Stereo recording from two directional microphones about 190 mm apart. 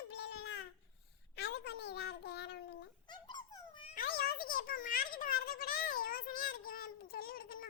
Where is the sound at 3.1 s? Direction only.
25° left (ahead or behind).